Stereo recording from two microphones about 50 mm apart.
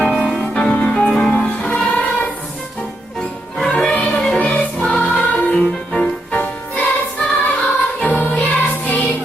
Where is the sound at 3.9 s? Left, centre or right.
Left.